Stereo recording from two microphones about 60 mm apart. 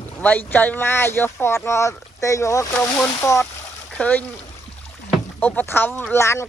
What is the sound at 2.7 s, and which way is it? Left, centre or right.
Speech, left.